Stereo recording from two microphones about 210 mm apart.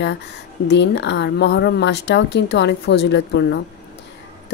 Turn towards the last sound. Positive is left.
turn(degrees=55)  # may be behind; listen again after turning